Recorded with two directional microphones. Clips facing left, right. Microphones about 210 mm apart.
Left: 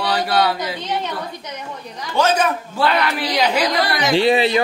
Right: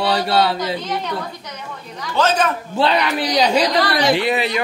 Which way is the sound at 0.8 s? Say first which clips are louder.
Even; 20° left (ahead or behind).